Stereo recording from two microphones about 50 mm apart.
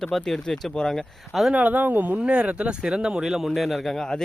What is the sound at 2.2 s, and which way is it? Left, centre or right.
Speech, right.